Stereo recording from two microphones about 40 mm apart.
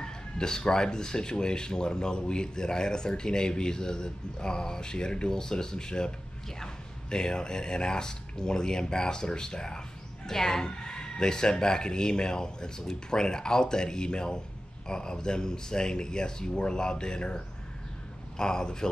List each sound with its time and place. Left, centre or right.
0.0 s speech: centre
18.4 s speech: centre